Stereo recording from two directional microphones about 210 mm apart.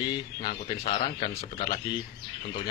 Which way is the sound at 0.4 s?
25° left (ahead or behind).